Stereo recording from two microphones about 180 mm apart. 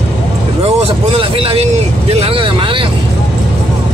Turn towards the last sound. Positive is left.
turn(degrees=-30)  # may be behind; listen again after turning